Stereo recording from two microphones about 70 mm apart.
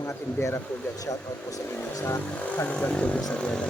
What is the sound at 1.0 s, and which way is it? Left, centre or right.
Speech, left.